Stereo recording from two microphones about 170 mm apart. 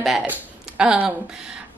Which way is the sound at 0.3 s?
5° right (ahead or behind).